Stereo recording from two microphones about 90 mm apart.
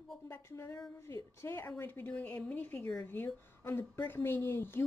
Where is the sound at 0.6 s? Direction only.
35° left (ahead or behind).